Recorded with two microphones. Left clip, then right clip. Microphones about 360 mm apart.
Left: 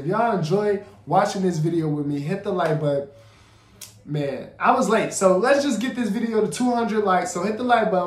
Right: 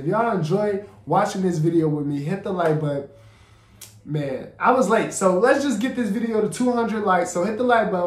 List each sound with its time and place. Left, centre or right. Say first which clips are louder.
0.1 s speech: even; centre
4.1 s speech: even; centre